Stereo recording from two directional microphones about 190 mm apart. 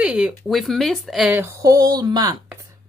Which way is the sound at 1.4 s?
15° right (ahead or behind).